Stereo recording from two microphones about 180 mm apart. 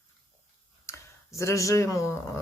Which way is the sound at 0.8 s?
15° left (ahead or behind).